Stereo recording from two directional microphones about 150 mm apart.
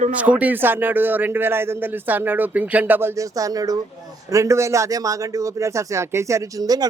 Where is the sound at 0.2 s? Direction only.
10° right (ahead or behind).